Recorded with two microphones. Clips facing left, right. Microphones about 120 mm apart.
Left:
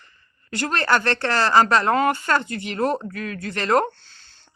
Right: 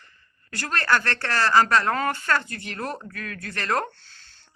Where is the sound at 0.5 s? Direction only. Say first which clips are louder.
Left 3 dB; 25° left (ahead or behind).